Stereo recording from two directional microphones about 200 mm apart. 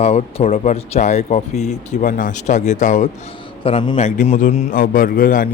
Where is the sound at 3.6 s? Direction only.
25° left (ahead or behind).